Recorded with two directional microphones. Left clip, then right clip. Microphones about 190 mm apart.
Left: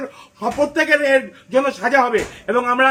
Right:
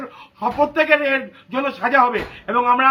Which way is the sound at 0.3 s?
15° right (ahead or behind).